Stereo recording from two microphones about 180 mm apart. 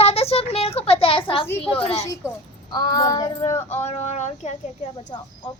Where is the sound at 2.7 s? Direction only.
20° left (ahead or behind).